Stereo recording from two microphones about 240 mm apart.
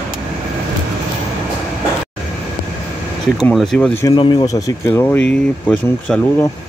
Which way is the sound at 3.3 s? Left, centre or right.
Centre.